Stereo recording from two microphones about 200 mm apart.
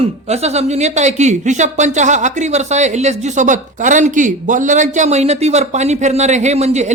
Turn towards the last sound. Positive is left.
turn(degrees=-35)  # may be behind; listen again after turning